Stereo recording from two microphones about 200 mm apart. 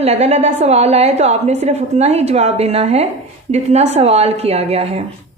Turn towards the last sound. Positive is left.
turn(degrees=-30)  # may be behind; listen again after turning